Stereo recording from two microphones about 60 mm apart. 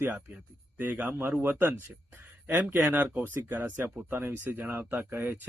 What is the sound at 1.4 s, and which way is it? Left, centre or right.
Speech, right.